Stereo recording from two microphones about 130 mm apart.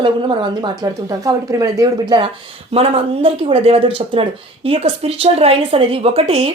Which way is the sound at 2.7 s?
50° right (ahead or behind).